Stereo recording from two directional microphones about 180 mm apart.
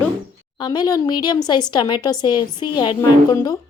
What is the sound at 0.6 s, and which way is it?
A woman's voice, 20° left (ahead or behind).